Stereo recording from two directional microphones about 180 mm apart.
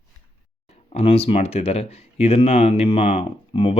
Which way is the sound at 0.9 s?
35° left (ahead or behind).